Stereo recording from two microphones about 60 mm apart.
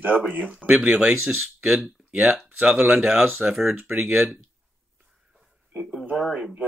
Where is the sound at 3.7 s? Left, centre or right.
Right.